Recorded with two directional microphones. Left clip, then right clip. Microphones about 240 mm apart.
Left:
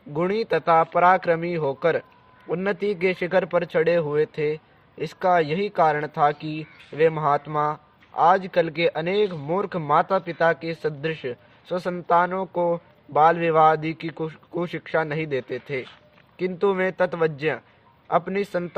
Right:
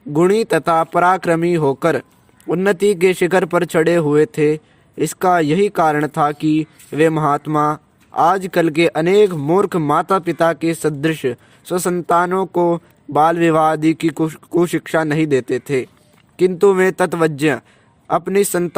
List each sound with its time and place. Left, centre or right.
0.1 s a man's voice: right